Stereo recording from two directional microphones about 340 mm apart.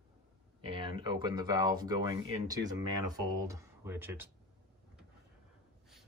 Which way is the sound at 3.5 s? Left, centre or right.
Centre.